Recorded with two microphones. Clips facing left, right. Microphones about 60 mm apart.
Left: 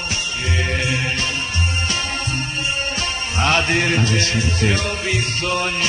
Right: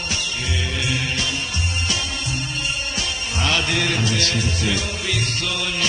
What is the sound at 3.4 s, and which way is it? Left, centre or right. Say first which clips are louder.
Music: left 4 dB; left.